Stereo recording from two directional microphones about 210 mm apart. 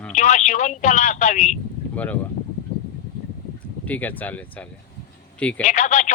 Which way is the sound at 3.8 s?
10° left (ahead or behind).